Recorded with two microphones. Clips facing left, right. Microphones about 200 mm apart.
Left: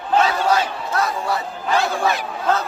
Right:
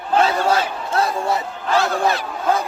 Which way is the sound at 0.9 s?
25° right (ahead or behind).